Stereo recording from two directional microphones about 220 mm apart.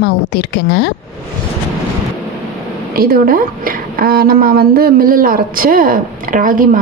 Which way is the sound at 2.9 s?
45° right (ahead or behind).